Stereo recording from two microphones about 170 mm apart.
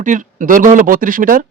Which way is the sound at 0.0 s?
50° right (ahead or behind).